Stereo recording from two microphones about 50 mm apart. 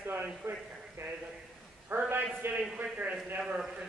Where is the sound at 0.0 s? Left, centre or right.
Right.